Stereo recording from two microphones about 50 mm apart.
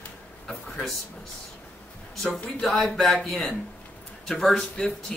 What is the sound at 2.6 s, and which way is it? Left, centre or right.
A man's voice, centre.